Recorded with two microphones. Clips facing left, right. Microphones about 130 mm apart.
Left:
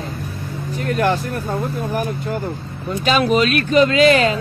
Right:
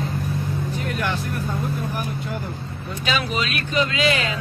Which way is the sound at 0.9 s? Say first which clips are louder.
Left 10 dB; 40° left (ahead or behind).